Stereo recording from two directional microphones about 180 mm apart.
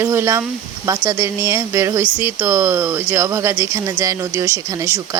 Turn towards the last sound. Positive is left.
turn(degrees=-20)  # may be behind; listen again after turning